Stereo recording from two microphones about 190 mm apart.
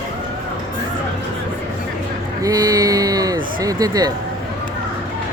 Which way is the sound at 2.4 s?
20° right (ahead or behind).